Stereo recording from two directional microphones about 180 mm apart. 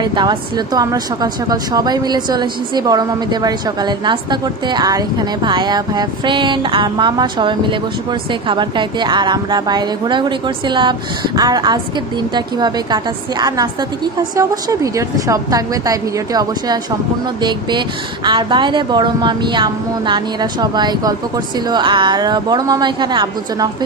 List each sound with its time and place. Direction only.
0.0 s a woman's voice: 25° right (ahead or behind)